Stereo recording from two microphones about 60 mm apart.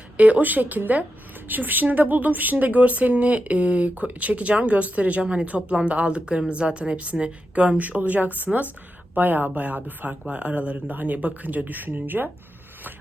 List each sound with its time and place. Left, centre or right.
0.2 s a woman's voice: right